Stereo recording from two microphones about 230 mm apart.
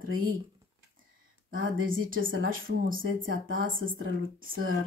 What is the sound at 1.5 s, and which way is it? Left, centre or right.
Speech, right.